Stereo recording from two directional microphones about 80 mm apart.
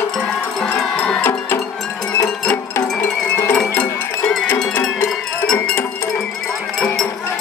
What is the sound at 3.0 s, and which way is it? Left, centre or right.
Music, left.